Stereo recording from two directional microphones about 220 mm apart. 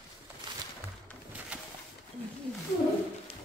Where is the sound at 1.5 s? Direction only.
5° right (ahead or behind).